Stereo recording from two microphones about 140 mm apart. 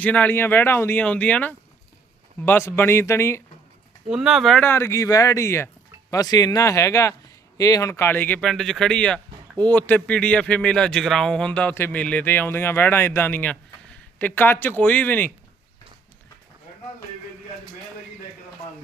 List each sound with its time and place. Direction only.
0.0 s speech: 10° left (ahead or behind)
4.1 s speech: 5° right (ahead or behind)
4.6 s speech: 15° left (ahead or behind)